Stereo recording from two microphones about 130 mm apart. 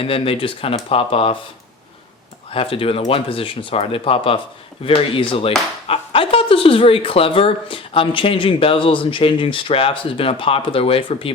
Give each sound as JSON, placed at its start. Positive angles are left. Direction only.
{"t": 0.0, "sound": "speech", "side_deg": 45}
{"t": 2.5, "sound": "speech", "side_deg": 45}